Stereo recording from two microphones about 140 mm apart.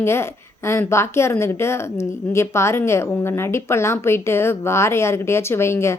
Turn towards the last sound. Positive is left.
turn(degrees=20)  # may be behind; listen again after turning